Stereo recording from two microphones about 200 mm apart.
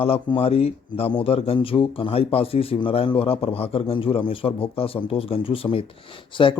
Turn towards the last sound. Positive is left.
turn(degrees=25)  # may be behind; listen again after turning